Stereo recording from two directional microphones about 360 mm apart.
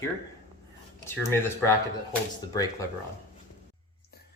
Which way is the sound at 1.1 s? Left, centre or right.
Centre.